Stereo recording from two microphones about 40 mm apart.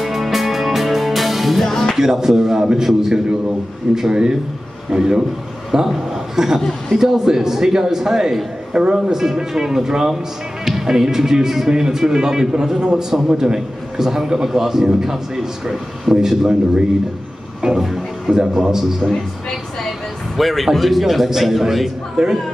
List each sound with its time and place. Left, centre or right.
0.0 s music: centre
2.0 s speech: centre
17.6 s music: centre
17.8 s speech: centre
20.3 s a man's voice: centre
22.1 s speech: centre